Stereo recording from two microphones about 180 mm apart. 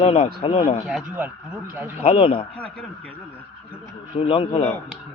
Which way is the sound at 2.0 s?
35° left (ahead or behind).